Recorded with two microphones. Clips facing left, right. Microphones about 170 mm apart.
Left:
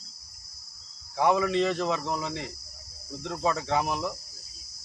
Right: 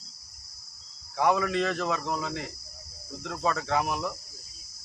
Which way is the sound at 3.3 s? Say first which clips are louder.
Left 1 dB; 15° left (ahead or behind).